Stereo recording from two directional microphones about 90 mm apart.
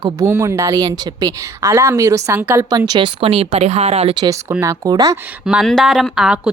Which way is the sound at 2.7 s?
50° right (ahead or behind).